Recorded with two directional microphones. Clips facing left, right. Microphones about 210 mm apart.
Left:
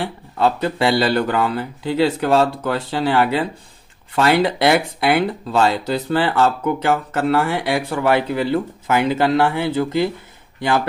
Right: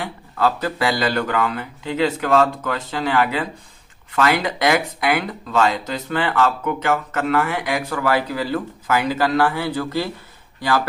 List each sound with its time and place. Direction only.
0.0 s speech: 25° left (ahead or behind)